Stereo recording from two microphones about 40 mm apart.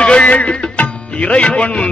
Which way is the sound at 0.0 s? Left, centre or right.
Left.